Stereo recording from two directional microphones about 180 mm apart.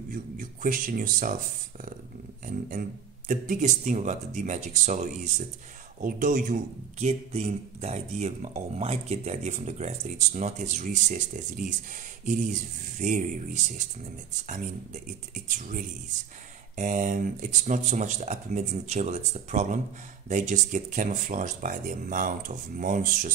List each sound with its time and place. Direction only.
0.1 s speech: 50° right (ahead or behind)
3.3 s speech: 45° right (ahead or behind)
15.4 s speech: 45° right (ahead or behind)